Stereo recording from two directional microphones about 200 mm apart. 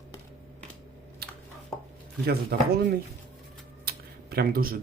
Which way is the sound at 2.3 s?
50° right (ahead or behind).